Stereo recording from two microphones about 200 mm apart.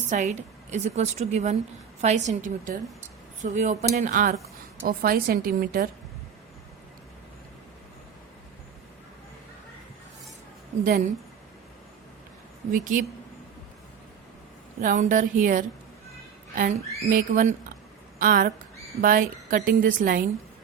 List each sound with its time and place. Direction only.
0.1 s a woman's voice: 35° right (ahead or behind)
10.8 s a woman's voice: 45° right (ahead or behind)
12.7 s a woman's voice: 40° right (ahead or behind)
14.8 s a woman's voice: 40° right (ahead or behind)
17.1 s a woman's voice: 40° right (ahead or behind)